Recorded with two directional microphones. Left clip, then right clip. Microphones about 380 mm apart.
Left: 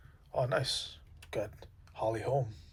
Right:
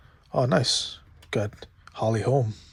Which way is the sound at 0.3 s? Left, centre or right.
Centre.